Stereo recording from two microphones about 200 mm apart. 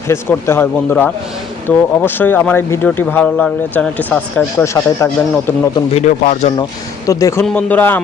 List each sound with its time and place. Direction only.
0.1 s speech: 10° left (ahead or behind)
5.7 s speech: 35° left (ahead or behind)
7.1 s speech: 15° left (ahead or behind)